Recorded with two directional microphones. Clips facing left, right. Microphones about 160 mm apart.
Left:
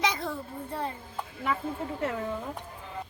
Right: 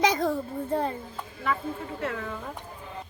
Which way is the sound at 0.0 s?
40° right (ahead or behind).